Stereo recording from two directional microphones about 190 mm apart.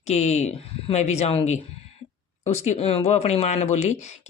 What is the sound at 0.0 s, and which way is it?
Speech, 35° left (ahead or behind).